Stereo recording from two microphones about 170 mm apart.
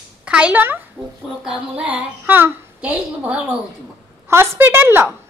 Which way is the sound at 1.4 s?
5° right (ahead or behind).